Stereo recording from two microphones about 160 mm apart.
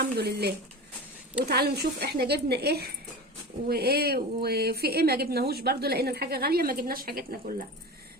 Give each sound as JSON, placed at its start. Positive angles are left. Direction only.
{"t": 0.0, "sound": "a woman's voice", "side_deg": -90}